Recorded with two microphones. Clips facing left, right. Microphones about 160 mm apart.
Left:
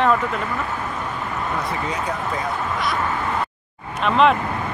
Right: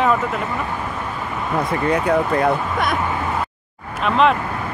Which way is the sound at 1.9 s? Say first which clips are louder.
Right 8 dB; 60° right (ahead or behind).